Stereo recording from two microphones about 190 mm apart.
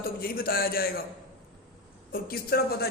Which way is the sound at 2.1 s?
55° left (ahead or behind).